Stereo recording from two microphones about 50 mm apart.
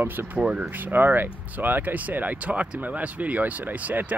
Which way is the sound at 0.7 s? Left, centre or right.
Right.